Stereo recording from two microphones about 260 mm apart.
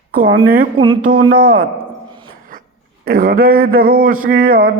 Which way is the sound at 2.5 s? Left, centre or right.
Right.